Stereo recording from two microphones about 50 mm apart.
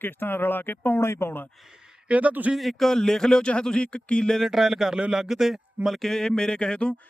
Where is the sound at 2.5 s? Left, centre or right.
Centre; by 4.2 s left.